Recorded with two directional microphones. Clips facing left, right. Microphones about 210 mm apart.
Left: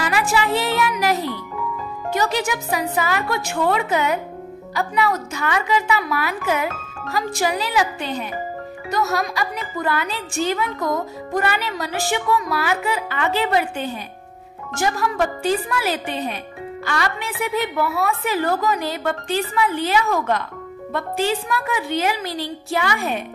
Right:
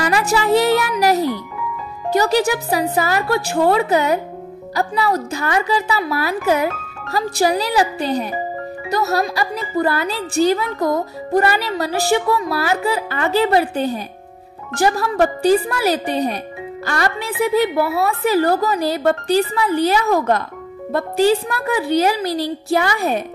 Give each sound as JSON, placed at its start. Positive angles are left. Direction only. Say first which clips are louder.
{"t": 0.0, "sound": "speech", "louder": "right 3 dB", "side_deg": -40}